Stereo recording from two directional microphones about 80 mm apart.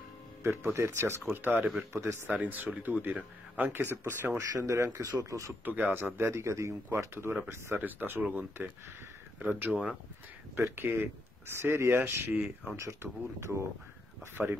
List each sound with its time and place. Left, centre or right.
0.4 s speech: right
1.9 s speech: right
2.2 s speech: centre
3.9 s speech: right
4.4 s speech: right
5.7 s speech: right
10.8 s speech: right
12.7 s speech: right